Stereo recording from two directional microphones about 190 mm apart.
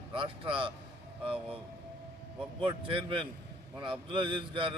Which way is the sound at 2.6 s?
25° right (ahead or behind).